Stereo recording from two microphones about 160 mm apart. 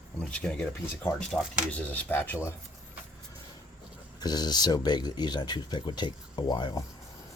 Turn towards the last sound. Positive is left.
turn(degrees=25)  # may be behind; listen again after turning